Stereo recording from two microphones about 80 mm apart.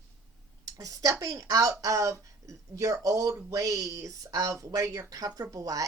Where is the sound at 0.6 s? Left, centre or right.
Right.